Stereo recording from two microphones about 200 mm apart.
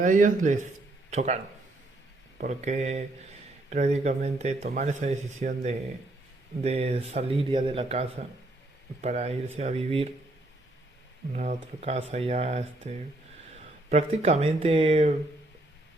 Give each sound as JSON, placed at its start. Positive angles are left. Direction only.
{"t": 0.0, "sound": "speech", "side_deg": -40}
{"t": 2.4, "sound": "speech", "side_deg": -35}
{"t": 6.6, "sound": "speech", "side_deg": -30}
{"t": 11.3, "sound": "speech", "side_deg": -35}
{"t": 13.9, "sound": "speech", "side_deg": -30}